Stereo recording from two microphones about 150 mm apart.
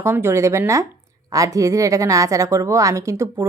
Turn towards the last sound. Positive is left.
turn(degrees=-20)  # may be behind; listen again after turning